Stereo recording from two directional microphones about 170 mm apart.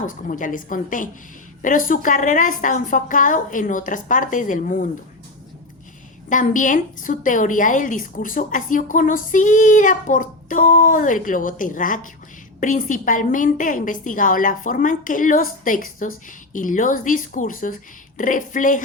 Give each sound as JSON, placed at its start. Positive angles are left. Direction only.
{"t": 0.0, "sound": "a woman's voice", "side_deg": 50}
{"t": 6.2, "sound": "a woman's voice", "side_deg": 50}